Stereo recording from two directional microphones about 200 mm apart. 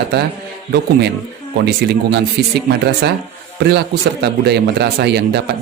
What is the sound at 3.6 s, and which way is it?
Speech, 55° right (ahead or behind).